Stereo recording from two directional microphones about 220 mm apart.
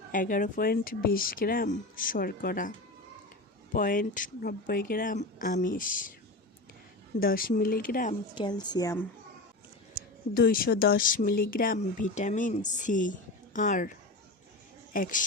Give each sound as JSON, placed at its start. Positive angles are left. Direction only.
{"t": 0.1, "sound": "speech", "side_deg": 35}
{"t": 7.2, "sound": "speech", "side_deg": 40}
{"t": 8.4, "sound": "a woman's voice", "side_deg": 20}
{"t": 10.3, "sound": "speech", "side_deg": 40}
{"t": 14.9, "sound": "speech", "side_deg": 40}